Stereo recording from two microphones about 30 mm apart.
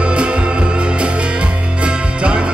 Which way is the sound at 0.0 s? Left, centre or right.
Right.